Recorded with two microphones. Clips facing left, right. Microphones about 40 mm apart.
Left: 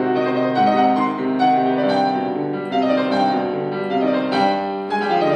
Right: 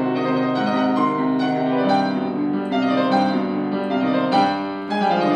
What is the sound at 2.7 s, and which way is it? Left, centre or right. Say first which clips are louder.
Music: left 1 dB; centre.